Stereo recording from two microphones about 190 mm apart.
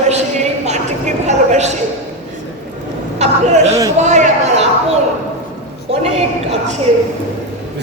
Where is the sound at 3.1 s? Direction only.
35° right (ahead or behind).